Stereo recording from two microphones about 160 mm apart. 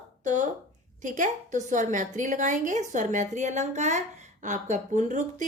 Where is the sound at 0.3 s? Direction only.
50° right (ahead or behind).